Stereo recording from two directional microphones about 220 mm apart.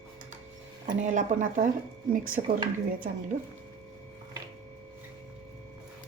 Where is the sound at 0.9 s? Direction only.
35° right (ahead or behind).